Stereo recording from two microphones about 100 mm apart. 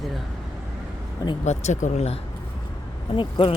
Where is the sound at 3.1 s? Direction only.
60° left (ahead or behind).